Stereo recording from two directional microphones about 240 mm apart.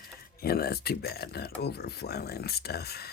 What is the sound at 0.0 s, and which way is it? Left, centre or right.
Speech, left.